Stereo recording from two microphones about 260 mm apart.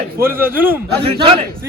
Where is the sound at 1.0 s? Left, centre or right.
Right.